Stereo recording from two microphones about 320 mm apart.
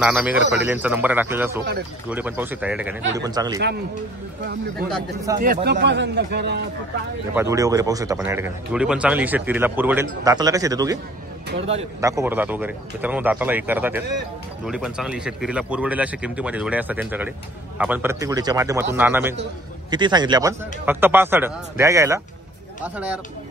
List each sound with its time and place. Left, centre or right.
0.0 s speech: centre
5.4 s a man's voice: right
7.3 s speech: centre